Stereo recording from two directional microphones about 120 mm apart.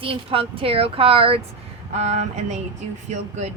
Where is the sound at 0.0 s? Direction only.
50° right (ahead or behind).